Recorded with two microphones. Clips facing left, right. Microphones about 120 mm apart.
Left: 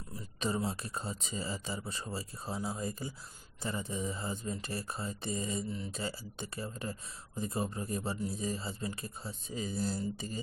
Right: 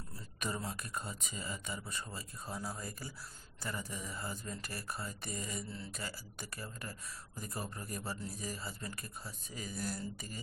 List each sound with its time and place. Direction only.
0.3 s speech: 25° left (ahead or behind)